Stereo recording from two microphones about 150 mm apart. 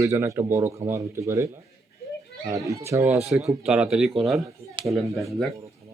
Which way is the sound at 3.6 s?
5° right (ahead or behind).